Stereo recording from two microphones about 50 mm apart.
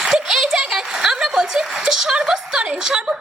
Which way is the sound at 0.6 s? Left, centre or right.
Centre.